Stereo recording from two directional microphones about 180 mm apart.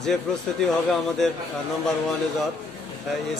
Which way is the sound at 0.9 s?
Centre (ahead or behind).